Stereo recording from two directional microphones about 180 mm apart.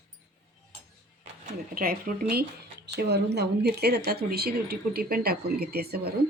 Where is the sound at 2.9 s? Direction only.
70° right (ahead or behind).